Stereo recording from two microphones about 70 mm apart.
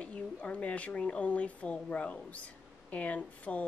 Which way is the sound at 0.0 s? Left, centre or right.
Centre.